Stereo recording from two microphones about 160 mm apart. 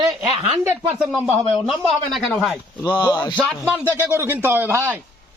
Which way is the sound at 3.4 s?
10° right (ahead or behind).